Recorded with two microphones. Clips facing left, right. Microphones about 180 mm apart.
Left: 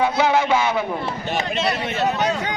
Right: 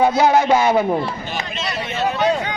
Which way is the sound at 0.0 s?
45° right (ahead or behind).